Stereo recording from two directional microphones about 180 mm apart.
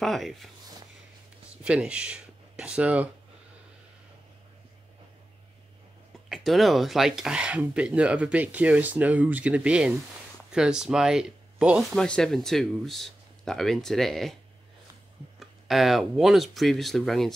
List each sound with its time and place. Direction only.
0.0 s speech: centre (ahead or behind)
1.6 s speech: 5° right (ahead or behind)
6.2 s speech: centre (ahead or behind)
15.3 s speech: centre (ahead or behind)